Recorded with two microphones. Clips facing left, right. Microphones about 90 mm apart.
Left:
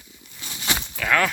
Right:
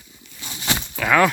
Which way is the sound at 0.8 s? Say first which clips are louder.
Right 5 dB; 5° right (ahead or behind).